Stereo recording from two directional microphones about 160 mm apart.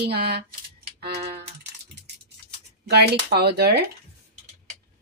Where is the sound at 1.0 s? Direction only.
90° right.